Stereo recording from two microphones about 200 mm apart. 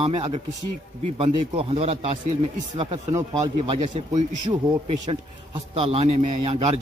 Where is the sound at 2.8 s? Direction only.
20° right (ahead or behind).